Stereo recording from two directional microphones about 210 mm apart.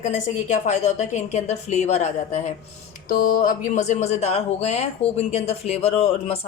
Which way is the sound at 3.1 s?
45° left (ahead or behind).